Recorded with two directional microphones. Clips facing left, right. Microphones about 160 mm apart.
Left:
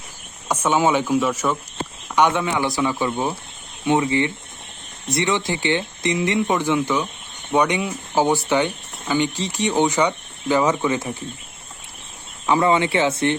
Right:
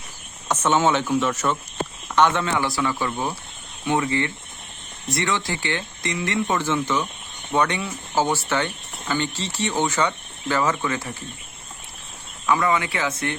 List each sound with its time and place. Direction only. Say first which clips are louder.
0.4 s speech: left 1 dB; 10° left (ahead or behind)
12.5 s speech: left 4 dB; 25° left (ahead or behind)